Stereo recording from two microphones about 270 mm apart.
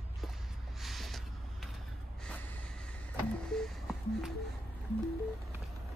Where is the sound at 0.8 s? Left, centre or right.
Centre.